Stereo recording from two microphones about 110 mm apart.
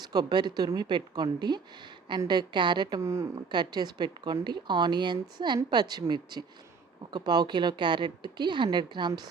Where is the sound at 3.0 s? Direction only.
25° right (ahead or behind).